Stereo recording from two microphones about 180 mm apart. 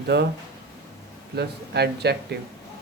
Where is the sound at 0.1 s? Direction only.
70° right (ahead or behind).